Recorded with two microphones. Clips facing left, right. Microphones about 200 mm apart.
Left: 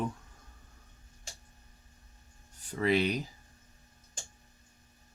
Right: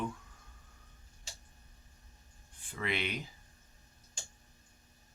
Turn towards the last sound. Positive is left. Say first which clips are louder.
# left 9 dB
turn(degrees=40)  # may be behind; listen again after turning